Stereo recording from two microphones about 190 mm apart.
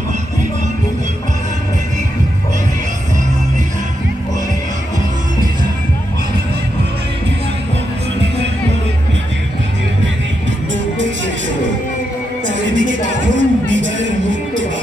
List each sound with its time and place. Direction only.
12.4 s music: 75° right (ahead or behind)